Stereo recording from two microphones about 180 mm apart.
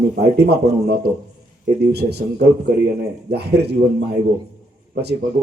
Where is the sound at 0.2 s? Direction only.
65° right (ahead or behind).